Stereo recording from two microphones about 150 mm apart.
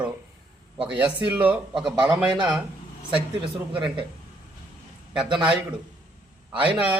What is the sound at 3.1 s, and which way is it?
Speech, 35° right (ahead or behind).